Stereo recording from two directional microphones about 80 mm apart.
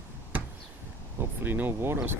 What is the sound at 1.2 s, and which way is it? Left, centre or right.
Speech, right.